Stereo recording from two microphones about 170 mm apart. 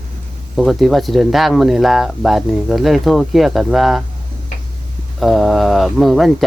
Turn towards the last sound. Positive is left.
turn(degrees=0)  # may be behind; listen again after turning